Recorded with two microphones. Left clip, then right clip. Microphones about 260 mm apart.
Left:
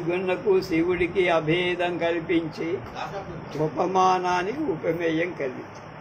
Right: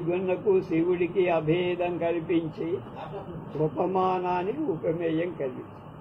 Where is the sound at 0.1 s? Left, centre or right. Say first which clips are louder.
Left 2 dB; left.